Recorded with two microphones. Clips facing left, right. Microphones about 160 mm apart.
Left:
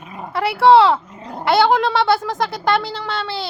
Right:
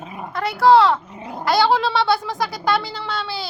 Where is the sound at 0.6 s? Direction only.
30° left (ahead or behind).